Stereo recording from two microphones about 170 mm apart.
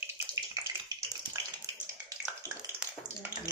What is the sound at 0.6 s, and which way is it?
Bathtub, 25° right (ahead or behind).